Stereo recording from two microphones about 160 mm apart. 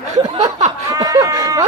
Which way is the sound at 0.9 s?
20° right (ahead or behind).